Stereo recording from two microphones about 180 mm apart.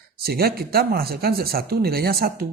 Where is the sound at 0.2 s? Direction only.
60° right (ahead or behind).